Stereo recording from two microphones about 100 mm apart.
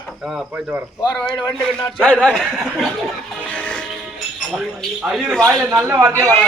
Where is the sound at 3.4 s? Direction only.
15° left (ahead or behind).